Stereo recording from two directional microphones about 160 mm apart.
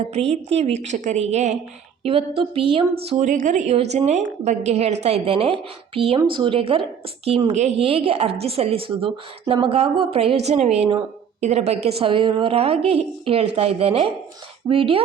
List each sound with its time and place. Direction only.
0.0 s a woman's voice: 40° right (ahead or behind)
3.1 s a woman's voice: 50° right (ahead or behind); by 15.0 s 35° right (ahead or behind)